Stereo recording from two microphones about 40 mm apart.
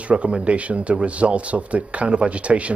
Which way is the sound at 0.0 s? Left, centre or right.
Right.